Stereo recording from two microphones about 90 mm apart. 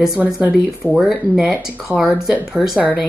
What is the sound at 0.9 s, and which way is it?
Speech, 5° right (ahead or behind).